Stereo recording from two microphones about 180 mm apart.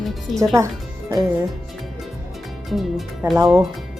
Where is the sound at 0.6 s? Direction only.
15° right (ahead or behind).